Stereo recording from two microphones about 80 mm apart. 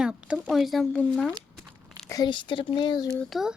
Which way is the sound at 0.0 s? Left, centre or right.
Centre.